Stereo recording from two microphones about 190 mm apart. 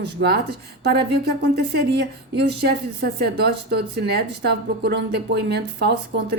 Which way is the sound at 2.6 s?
60° right (ahead or behind).